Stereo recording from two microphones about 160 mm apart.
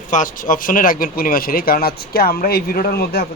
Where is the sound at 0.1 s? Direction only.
55° left (ahead or behind).